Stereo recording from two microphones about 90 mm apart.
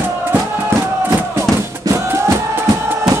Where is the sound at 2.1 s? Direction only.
25° right (ahead or behind).